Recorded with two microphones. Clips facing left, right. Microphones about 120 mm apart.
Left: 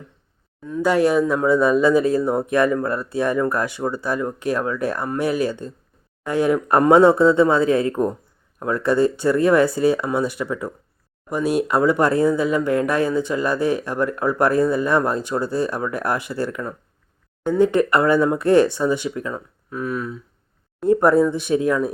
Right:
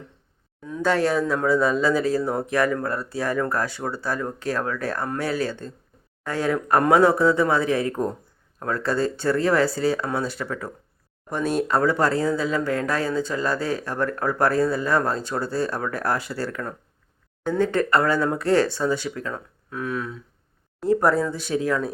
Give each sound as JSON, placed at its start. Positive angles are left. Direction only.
{"t": 0.8, "sound": "a man's voice", "side_deg": 15}
{"t": 20.8, "sound": "a man's voice", "side_deg": 20}